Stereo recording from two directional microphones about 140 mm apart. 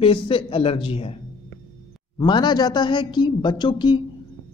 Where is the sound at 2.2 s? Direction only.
35° left (ahead or behind).